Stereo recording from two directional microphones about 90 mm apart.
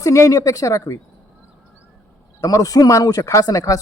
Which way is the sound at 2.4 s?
40° left (ahead or behind).